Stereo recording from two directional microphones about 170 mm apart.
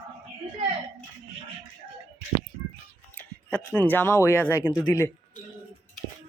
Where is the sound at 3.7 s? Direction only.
10° left (ahead or behind).